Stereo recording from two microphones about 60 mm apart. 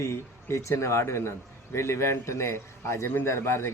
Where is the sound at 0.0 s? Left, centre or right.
Left.